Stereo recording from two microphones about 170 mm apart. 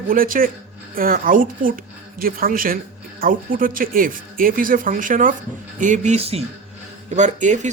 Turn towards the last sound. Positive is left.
turn(degrees=-45)  # may be behind; listen again after turning